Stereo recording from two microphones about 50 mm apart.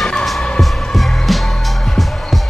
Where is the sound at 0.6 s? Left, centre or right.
Centre.